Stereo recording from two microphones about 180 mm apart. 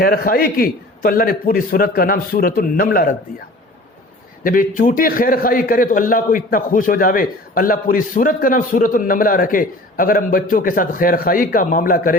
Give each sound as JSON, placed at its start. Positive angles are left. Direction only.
{"t": 0.0, "sound": "a man's voice", "side_deg": 55}
{"t": 4.4, "sound": "a man's voice", "side_deg": 50}